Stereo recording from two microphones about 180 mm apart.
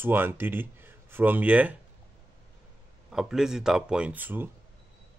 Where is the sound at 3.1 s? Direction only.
5° right (ahead or behind).